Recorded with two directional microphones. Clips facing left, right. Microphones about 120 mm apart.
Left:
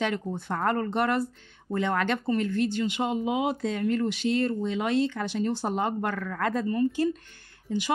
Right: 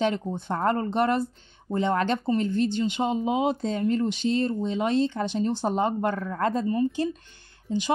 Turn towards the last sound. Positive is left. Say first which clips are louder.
# right 2 dB
turn(degrees=-25)  # may be behind; listen again after turning